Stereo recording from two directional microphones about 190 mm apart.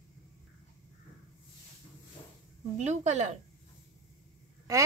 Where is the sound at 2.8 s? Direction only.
35° right (ahead or behind).